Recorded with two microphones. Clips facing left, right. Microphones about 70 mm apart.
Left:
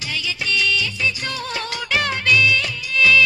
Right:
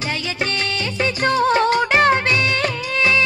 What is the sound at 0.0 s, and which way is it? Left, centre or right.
Music, right.